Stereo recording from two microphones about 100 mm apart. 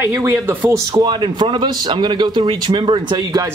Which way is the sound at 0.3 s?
20° right (ahead or behind).